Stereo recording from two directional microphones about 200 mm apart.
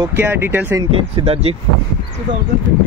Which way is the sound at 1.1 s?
30° right (ahead or behind).